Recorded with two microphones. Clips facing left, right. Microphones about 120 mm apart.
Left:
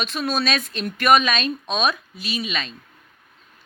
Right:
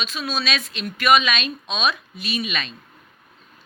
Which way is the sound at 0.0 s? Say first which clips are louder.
Left 3 dB; 55° left (ahead or behind).